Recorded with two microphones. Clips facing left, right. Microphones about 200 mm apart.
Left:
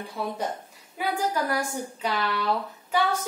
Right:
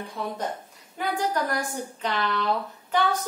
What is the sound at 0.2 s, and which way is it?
A woman's voice, 5° left (ahead or behind).